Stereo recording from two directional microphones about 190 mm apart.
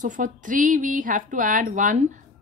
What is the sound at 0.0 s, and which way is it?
Speech, 40° right (ahead or behind).